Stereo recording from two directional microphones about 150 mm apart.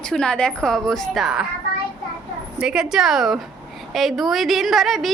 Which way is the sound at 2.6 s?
5° right (ahead or behind).